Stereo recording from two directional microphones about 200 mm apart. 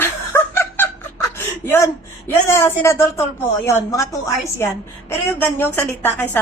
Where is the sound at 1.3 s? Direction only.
10° left (ahead or behind).